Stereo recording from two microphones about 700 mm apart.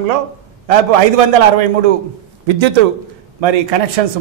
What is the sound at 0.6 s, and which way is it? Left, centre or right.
Speech, right.